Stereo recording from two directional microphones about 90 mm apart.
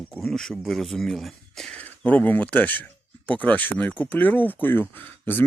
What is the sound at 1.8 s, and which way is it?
Speech, 20° left (ahead or behind).